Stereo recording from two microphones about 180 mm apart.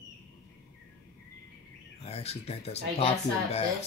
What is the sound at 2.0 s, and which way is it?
Speech, 35° left (ahead or behind).